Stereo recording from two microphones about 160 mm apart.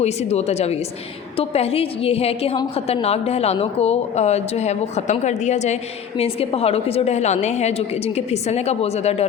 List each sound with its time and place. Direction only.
0.0 s a woman's voice: 40° left (ahead or behind)